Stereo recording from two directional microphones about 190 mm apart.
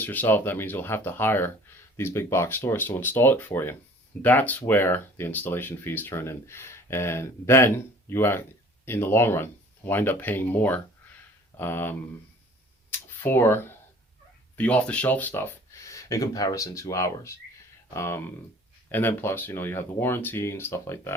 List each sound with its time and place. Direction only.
0.0 s speech: 10° left (ahead or behind)
13.2 s speech: 15° left (ahead or behind)